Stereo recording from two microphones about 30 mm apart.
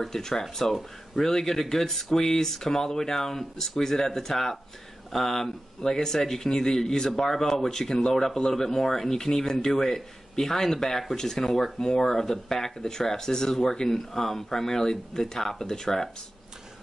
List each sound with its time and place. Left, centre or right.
0.0 s speech: centre
8.1 s speech: centre
8.4 s speech: left
8.6 s speech: centre